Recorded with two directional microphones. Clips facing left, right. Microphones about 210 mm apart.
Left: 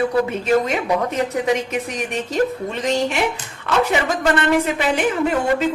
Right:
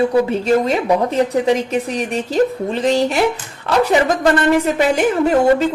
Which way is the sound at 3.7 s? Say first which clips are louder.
Right 4 dB; 35° right (ahead or behind).